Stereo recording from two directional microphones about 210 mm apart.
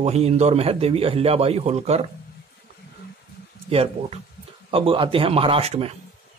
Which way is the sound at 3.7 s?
25° right (ahead or behind).